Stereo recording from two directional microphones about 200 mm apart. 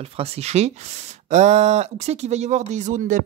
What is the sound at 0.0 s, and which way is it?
Speech, 30° right (ahead or behind).